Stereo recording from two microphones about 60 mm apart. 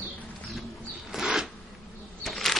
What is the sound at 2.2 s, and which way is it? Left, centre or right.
Bee, centre.